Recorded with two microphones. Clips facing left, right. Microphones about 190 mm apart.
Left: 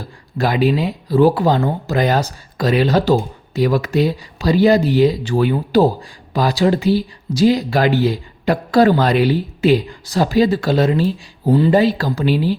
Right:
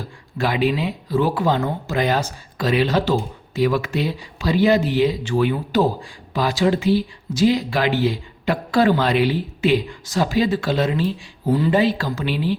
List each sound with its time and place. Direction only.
0.3 s speech: 40° left (ahead or behind)